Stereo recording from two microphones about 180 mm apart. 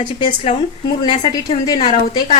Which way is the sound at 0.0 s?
25° left (ahead or behind).